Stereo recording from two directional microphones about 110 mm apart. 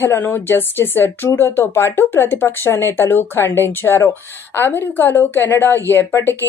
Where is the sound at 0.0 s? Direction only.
20° left (ahead or behind).